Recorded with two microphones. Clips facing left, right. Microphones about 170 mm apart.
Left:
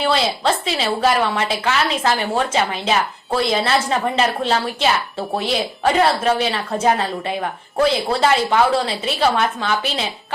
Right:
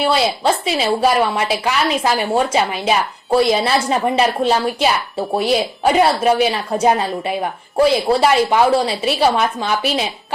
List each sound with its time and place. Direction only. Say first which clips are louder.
0.0 s a woman's voice: right 2 dB; 10° right (ahead or behind)